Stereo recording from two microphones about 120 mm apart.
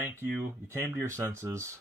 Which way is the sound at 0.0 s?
20° right (ahead or behind).